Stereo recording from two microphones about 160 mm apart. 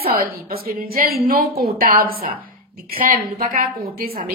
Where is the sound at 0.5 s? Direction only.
70° right (ahead or behind).